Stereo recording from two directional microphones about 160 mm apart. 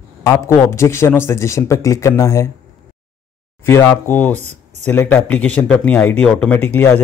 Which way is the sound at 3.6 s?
15° left (ahead or behind).